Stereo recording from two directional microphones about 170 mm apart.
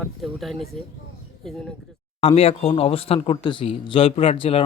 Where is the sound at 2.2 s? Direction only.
35° left (ahead or behind).